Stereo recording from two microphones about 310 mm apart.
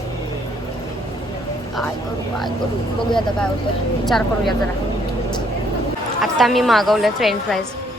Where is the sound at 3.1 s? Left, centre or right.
Centre.